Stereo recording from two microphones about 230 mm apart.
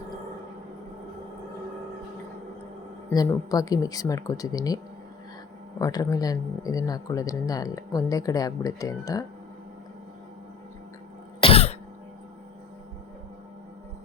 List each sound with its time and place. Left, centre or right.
3.1 s speech: centre
5.8 s speech: centre
11.3 s cough: left